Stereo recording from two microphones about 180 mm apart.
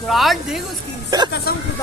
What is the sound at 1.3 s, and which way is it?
Speech, 60° left (ahead or behind).